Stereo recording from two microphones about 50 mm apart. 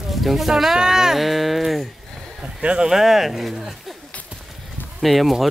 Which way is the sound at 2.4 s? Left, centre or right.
Right.